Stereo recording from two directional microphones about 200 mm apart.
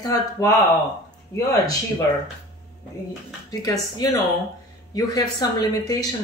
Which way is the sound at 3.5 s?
20° left (ahead or behind).